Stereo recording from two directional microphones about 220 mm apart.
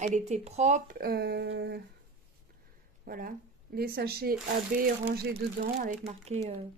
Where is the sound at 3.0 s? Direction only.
40° right (ahead or behind).